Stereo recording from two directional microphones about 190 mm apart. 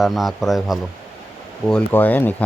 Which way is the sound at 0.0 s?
Centre (ahead or behind).